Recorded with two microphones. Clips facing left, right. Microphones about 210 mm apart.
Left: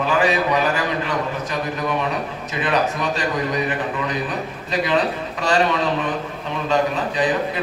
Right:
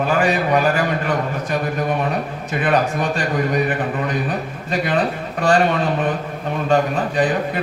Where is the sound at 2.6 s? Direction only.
50° right (ahead or behind).